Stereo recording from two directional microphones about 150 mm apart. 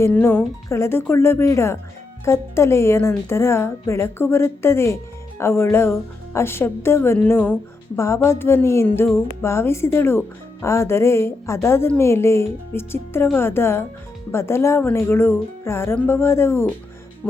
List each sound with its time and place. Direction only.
0.0 s speech: 15° left (ahead or behind)